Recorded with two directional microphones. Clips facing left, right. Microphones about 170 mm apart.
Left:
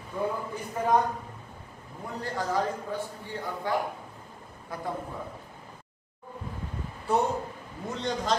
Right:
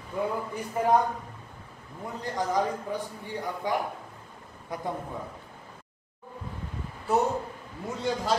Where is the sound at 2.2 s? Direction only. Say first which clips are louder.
Right 1 dB; 15° right (ahead or behind).